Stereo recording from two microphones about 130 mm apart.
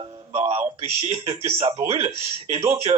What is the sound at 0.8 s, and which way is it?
Speech, 50° right (ahead or behind).